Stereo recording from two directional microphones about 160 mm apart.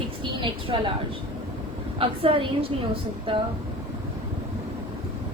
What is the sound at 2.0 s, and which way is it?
A woman's voice, 35° right (ahead or behind).